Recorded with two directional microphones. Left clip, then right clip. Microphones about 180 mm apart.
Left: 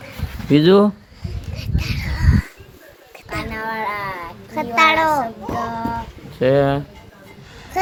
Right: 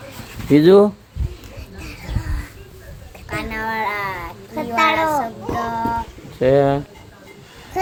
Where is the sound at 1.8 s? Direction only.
25° left (ahead or behind).